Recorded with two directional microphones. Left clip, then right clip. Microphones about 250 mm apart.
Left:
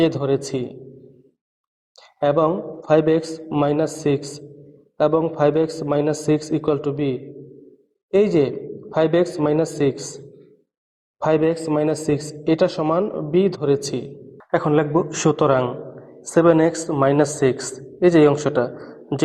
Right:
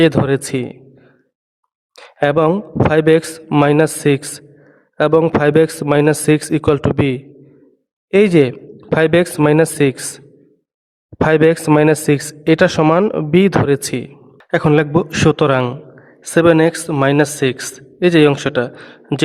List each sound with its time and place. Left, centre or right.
0.0 s a man's voice: right
2.0 s a man's voice: right